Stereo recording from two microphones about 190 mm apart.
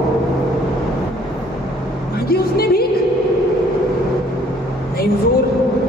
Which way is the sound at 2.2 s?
55° left (ahead or behind).